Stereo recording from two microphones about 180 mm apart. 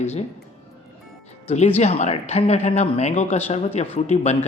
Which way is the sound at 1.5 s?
40° left (ahead or behind).